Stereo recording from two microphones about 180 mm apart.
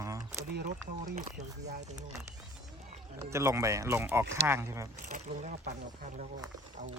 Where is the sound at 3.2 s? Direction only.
15° right (ahead or behind).